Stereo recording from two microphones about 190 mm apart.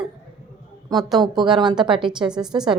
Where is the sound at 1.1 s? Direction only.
25° right (ahead or behind).